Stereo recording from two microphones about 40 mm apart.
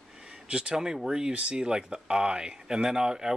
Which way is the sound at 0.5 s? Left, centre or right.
Right.